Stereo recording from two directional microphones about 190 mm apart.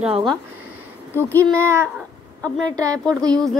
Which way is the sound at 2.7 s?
20° right (ahead or behind).